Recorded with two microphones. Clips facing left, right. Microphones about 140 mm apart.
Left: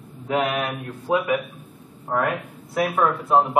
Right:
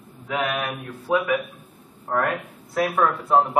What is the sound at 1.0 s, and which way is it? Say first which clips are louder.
Speech: even; 20° left (ahead or behind).